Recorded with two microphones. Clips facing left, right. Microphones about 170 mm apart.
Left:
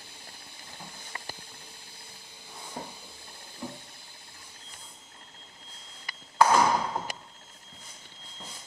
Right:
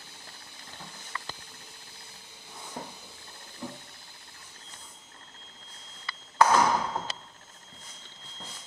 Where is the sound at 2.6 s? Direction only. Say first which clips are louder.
Even; 10° left (ahead or behind).